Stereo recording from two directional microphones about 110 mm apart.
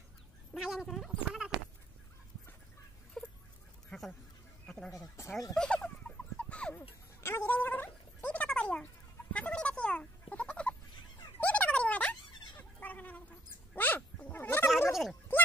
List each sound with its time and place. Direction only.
0.6 s a sound: 5° right (ahead or behind)
3.2 s chicken: 10° left (ahead or behind)
3.9 s a sound: 10° left (ahead or behind)
4.9 s dog: 25° left (ahead or behind)
5.5 s turkey: 10° left (ahead or behind)
7.2 s a sound: 25° left (ahead or behind)
9.3 s chicken: 10° left (ahead or behind)
11.3 s goat: 15° left (ahead or behind)
13.7 s dog: 15° left (ahead or behind)